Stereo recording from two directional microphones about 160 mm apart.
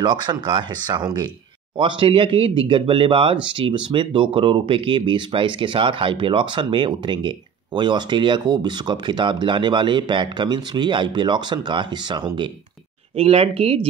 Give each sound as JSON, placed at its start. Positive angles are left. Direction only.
{"t": 0.0, "sound": "speech", "side_deg": -30}
{"t": 13.1, "sound": "speech", "side_deg": -40}